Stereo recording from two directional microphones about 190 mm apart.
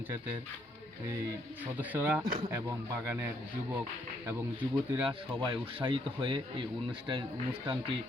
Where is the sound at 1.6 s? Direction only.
10° right (ahead or behind).